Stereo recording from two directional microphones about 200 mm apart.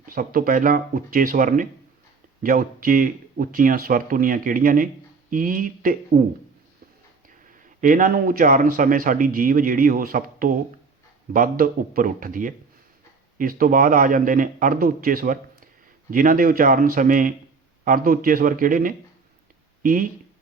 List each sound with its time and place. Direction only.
0.0 s a man's voice: 45° right (ahead or behind)
7.8 s a man's voice: 40° right (ahead or behind)